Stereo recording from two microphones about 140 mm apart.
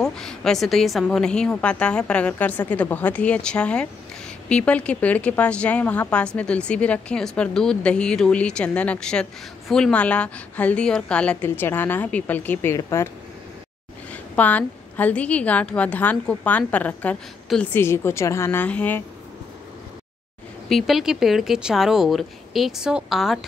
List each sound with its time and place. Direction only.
0.0 s a woman's voice: 5° left (ahead or behind); by 13.1 s 20° left (ahead or behind)
14.1 s a woman's voice: 10° left (ahead or behind)
20.6 s speech: centre (ahead or behind)